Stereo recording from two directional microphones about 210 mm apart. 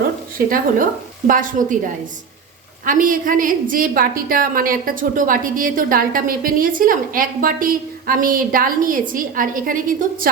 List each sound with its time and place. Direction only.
0.3 s a woman's voice: 40° right (ahead or behind)
2.8 s a woman's voice: 40° right (ahead or behind)